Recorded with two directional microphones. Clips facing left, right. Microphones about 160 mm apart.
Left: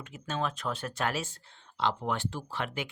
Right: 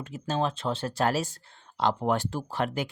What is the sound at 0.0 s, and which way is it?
Speech, 35° right (ahead or behind).